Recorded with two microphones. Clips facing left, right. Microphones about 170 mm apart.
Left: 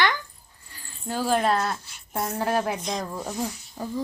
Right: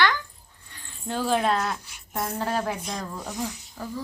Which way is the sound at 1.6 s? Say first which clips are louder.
Left 1 dB; 15° right (ahead or behind).